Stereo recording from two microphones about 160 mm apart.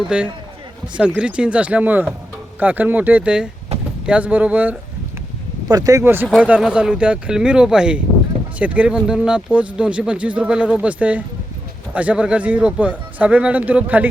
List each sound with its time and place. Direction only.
0.1 s speech: 5° right (ahead or behind)
3.7 s vehicle: 40° right (ahead or behind)
4.0 s speech: 10° right (ahead or behind)
5.6 s speech: 25° right (ahead or behind)
6.2 s speech: 5° right (ahead or behind)